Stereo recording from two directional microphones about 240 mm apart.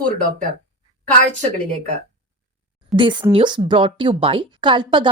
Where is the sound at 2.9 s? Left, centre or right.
Centre.